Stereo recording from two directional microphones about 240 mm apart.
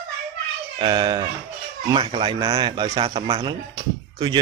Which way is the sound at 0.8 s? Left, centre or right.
Centre.